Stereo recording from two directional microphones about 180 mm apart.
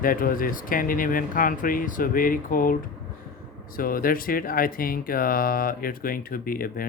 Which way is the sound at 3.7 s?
50° left (ahead or behind).